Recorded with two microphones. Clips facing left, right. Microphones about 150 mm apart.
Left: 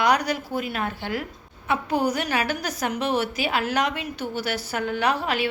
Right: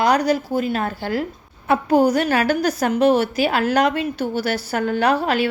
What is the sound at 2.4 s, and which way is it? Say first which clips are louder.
A woman's voice: right 8 dB; 35° right (ahead or behind).